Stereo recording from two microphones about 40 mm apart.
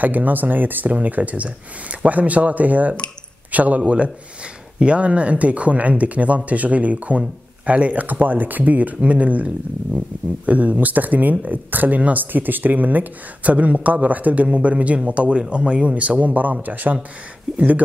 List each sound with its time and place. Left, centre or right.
0.0 s speech: right
0.9 s speech: right
3.8 s speech: right
16.2 s speech: right